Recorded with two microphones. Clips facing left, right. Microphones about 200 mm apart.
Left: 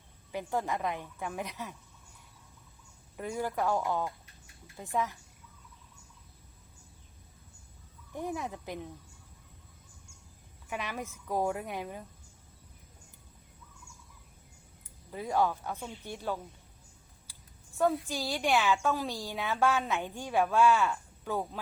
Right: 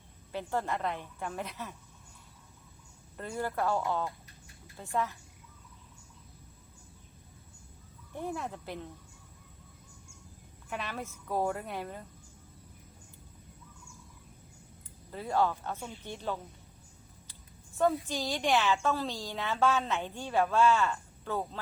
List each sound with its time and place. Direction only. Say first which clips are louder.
0.3 s a woman's voice: even; 15° left (ahead or behind)
3.2 s a woman's voice: left 1 dB; 10° left (ahead or behind)
8.1 s a woman's voice: left 1 dB; 15° left (ahead or behind)
10.7 s a woman's voice: left 1 dB; 15° left (ahead or behind)
15.1 s a woman's voice: even; 15° left (ahead or behind)
17.7 s a woman's voice: even; 5° left (ahead or behind)